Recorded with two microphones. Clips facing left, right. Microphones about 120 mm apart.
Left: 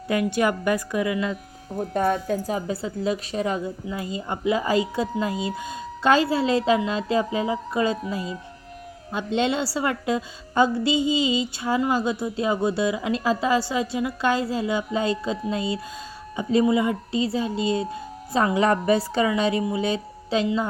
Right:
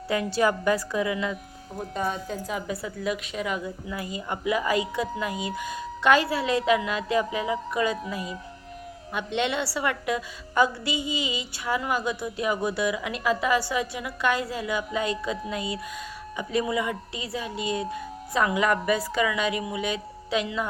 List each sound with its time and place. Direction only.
0.3 s a woman's voice: 15° left (ahead or behind)
1.9 s speech: 55° left (ahead or behind)
2.5 s a woman's voice: 30° left (ahead or behind)
9.1 s a woman's voice: 30° left (ahead or behind)